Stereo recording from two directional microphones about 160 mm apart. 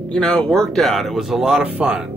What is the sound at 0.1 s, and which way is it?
Speech, 5° left (ahead or behind).